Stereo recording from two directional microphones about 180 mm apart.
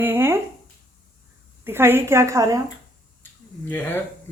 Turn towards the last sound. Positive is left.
turn(degrees=10)  # may be behind; listen again after turning